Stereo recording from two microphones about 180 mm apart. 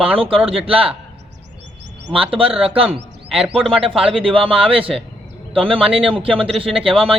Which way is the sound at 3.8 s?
30° right (ahead or behind).